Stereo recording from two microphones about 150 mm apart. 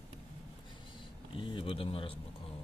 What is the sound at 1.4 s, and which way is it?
Speech, 35° left (ahead or behind).